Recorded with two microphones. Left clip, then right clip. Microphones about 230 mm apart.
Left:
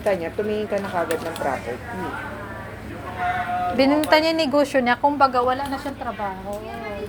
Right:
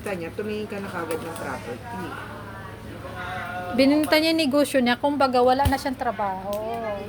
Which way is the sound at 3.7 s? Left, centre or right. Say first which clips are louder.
Left 1 dB; right.